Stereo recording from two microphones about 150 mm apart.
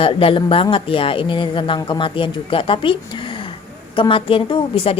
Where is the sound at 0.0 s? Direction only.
40° left (ahead or behind).